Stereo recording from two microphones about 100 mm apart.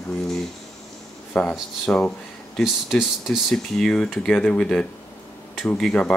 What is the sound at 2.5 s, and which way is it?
Speech, 5° right (ahead or behind).